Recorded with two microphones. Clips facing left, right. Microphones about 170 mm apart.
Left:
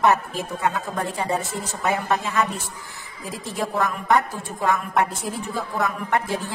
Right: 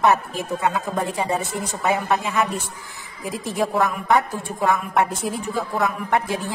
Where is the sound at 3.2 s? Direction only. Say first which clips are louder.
Right 4 dB; 15° right (ahead or behind).